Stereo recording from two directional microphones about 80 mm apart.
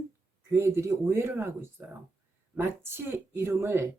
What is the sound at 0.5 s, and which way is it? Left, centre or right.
Speech, right.